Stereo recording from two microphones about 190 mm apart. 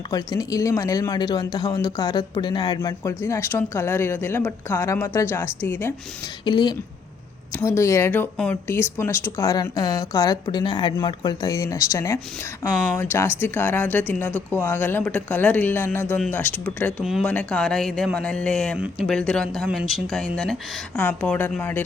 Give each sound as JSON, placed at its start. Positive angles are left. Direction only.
{"t": 0.1, "sound": "speech", "side_deg": 20}
{"t": 6.4, "sound": "a woman's voice", "side_deg": 25}